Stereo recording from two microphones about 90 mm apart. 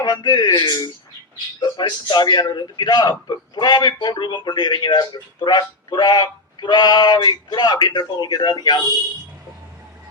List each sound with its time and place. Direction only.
0.0 s a man's voice: 55° left (ahead or behind)